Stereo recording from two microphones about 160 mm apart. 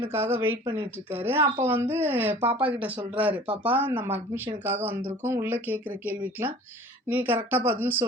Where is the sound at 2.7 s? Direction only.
10° right (ahead or behind).